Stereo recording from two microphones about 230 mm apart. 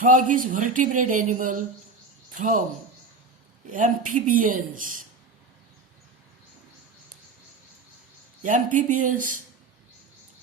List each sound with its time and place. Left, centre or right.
0.0 s speech: right
3.7 s speech: right
8.4 s speech: right